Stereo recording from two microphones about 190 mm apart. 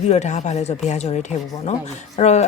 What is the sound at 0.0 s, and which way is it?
Speech, 35° left (ahead or behind).